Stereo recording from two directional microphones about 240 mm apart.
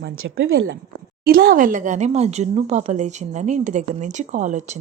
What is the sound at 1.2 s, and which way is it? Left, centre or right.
Speech, right.